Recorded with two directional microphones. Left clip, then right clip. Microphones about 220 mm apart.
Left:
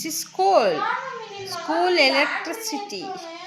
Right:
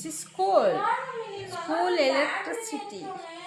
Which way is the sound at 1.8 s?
15° left (ahead or behind).